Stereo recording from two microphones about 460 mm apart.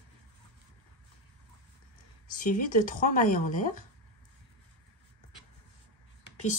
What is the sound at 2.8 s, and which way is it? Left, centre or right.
Speech, centre.